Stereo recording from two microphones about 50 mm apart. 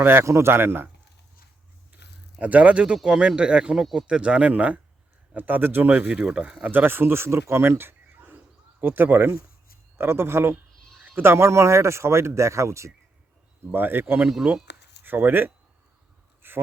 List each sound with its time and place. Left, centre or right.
0.0 s a man's voice: right
0.3 s a man's voice: right
2.4 s speech: right
5.3 s speech: right
6.4 s speech: right
6.7 s a man's voice: right
10.0 s speech: right
13.7 s a man's voice: right
14.2 s speech: centre
15.0 s speech: right
16.4 s a sound: right